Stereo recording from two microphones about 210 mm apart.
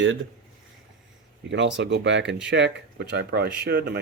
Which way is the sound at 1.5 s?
60° right (ahead or behind).